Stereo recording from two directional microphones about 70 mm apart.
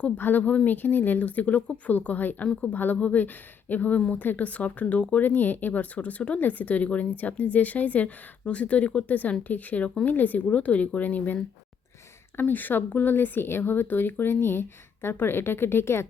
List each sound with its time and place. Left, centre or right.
0.2 s speech: left
2.7 s speech: left
12.4 s speech: left